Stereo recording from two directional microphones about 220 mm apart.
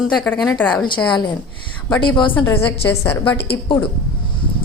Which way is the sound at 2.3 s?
10° left (ahead or behind).